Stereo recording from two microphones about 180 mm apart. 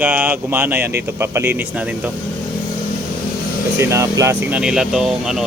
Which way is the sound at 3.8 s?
15° right (ahead or behind).